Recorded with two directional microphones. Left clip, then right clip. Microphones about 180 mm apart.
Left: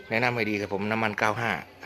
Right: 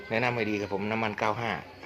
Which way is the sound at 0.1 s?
30° left (ahead or behind).